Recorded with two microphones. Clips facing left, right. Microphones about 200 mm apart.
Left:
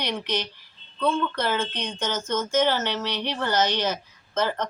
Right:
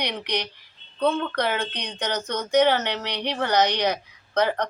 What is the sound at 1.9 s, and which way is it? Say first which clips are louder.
Speech: right 2 dB; 65° right (ahead or behind).